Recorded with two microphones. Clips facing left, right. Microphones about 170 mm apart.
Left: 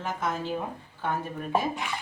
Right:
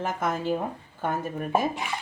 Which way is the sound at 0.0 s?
50° right (ahead or behind).